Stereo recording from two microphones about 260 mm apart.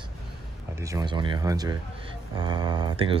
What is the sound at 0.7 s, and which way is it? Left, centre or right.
Speech, centre.